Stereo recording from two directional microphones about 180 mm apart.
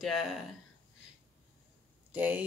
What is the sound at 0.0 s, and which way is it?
Speech, centre (ahead or behind).